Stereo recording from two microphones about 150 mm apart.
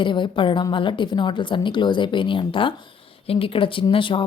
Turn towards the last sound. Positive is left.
turn(degrees=35)  # may be behind; listen again after turning